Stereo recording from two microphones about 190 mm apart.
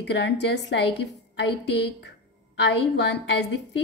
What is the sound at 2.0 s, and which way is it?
A woman's voice, 65° left (ahead or behind).